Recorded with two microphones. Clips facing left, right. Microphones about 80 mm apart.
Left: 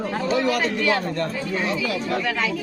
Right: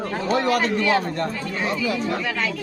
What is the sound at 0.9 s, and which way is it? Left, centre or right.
Speech, right.